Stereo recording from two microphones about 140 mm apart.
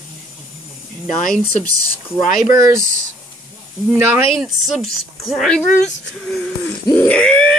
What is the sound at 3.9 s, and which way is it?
Speech, 15° right (ahead or behind).